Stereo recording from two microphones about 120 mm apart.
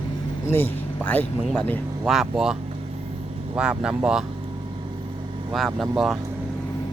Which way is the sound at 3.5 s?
5° right (ahead or behind).